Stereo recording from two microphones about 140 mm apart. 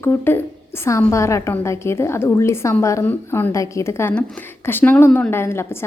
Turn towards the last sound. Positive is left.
turn(degrees=15)  # may be behind; listen again after turning